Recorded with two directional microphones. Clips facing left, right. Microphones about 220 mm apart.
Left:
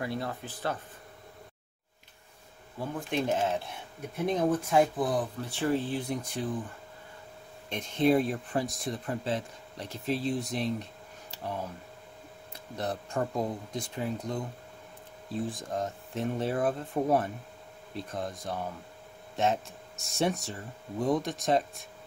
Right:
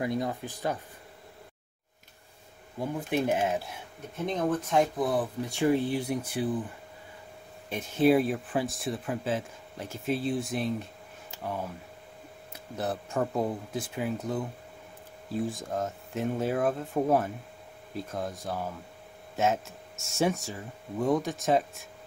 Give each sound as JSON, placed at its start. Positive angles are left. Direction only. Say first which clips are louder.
{"t": 0.0, "sound": "speech", "louder": "right 4 dB", "side_deg": -15}
{"t": 2.8, "sound": "speech", "louder": "right 3 dB", "side_deg": -10}
{"t": 4.3, "sound": "speech", "louder": "left 1 dB", "side_deg": 10}
{"t": 5.4, "sound": "speech", "louder": "right 4 dB", "side_deg": -10}
{"t": 7.7, "sound": "speech", "louder": "right 2 dB", "side_deg": -5}